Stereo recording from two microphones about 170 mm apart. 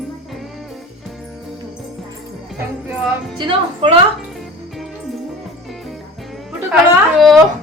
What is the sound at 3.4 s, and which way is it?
Music, 30° right (ahead or behind).